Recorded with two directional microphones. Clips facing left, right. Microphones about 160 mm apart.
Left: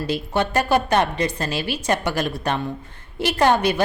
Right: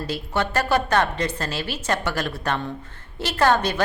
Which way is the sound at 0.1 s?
15° left (ahead or behind).